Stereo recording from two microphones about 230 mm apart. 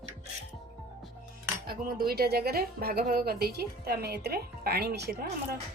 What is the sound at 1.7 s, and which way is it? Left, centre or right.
Speech, right.